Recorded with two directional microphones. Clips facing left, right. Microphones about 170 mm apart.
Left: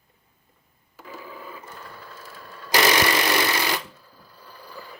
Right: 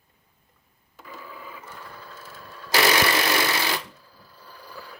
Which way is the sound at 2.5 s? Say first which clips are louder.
Left 1 dB; 15° left (ahead or behind).